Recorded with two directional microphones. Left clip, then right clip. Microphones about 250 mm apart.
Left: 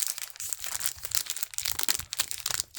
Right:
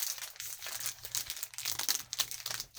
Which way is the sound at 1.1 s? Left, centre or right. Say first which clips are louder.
Left 7 dB; left.